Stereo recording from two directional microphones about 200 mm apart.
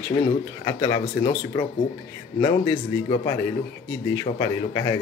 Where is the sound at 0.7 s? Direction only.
20° left (ahead or behind).